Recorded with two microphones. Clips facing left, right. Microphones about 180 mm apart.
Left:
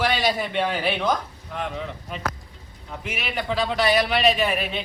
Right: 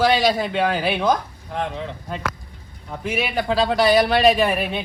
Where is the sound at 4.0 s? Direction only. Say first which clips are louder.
Right 5 dB; 55° right (ahead or behind).